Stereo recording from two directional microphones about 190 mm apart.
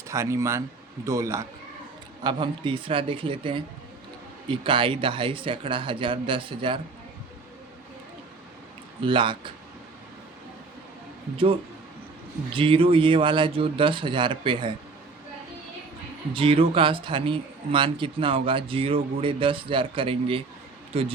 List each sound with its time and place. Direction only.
0.1 s speech: 15° right (ahead or behind)
2.2 s speech: 25° right (ahead or behind)
9.0 s speech: 25° right (ahead or behind)
12.5 s speech: 30° right (ahead or behind)
16.3 s speech: 30° right (ahead or behind)